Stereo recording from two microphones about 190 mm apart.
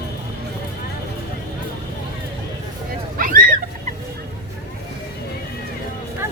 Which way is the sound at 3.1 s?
45° right (ahead or behind).